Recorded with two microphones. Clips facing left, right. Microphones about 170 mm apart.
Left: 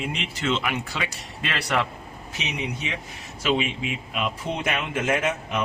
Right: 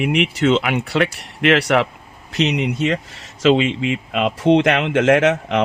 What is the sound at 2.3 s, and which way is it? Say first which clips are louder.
Speech: right 12 dB; 90° right.